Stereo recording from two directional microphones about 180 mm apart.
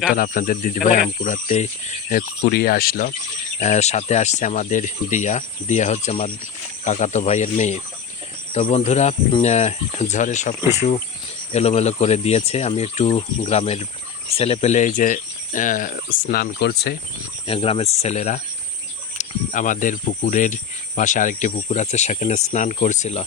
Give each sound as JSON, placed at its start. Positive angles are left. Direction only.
{"t": 0.1, "sound": "cricket", "side_deg": 50}
{"t": 2.4, "sound": "speech", "side_deg": 60}
{"t": 3.6, "sound": "speech", "side_deg": 40}
{"t": 14.3, "sound": "cricket", "side_deg": 35}
{"t": 17.4, "sound": "speech", "side_deg": 30}
{"t": 19.1, "sound": "cricket", "side_deg": 45}